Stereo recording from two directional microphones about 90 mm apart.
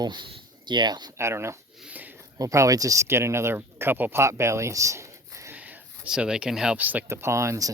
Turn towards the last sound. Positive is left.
turn(degrees=-35)  # may be behind; listen again after turning